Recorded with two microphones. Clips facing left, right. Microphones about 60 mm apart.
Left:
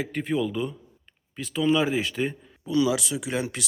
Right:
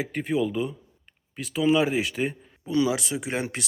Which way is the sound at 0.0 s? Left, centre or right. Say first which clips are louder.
Right 1 dB; centre.